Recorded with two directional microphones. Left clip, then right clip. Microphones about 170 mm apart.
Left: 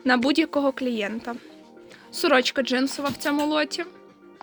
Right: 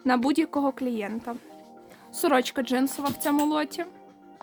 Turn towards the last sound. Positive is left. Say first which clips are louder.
# left 2 dB
turn(degrees=-15)  # may be behind; listen again after turning